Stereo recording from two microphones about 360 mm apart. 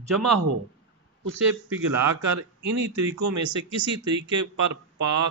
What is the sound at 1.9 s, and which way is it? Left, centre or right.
A man's voice, right.